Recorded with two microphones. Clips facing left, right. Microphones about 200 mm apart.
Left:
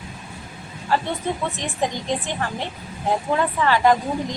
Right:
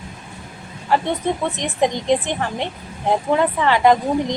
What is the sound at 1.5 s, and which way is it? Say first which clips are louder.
A woman's voice: right 5 dB; 20° right (ahead or behind).